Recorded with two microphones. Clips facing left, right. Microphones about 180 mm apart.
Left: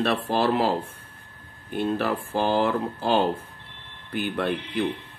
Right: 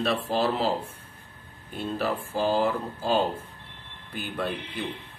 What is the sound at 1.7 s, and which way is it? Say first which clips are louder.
Speech: left 4 dB; 65° left (ahead or behind).